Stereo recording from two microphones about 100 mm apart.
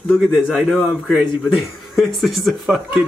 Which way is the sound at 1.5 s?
Centre (ahead or behind).